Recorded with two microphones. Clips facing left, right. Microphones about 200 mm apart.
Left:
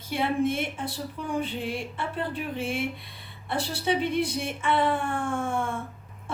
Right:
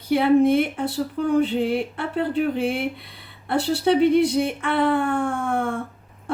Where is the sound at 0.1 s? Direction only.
60° right (ahead or behind).